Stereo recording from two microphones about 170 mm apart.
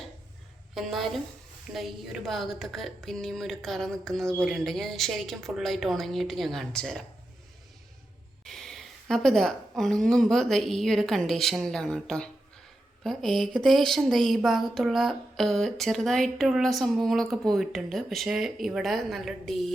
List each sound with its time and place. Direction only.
0.7 s speech: centre (ahead or behind)
8.4 s speech: centre (ahead or behind)